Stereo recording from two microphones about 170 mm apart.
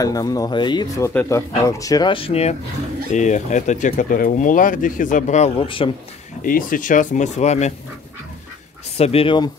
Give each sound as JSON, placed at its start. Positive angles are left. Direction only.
{"t": 0.0, "sound": "speech", "side_deg": 20}
{"t": 3.1, "sound": "speech", "side_deg": 45}
{"t": 5.6, "sound": "speech", "side_deg": 30}
{"t": 6.4, "sound": "speech", "side_deg": 55}
{"t": 8.9, "sound": "speech", "side_deg": 35}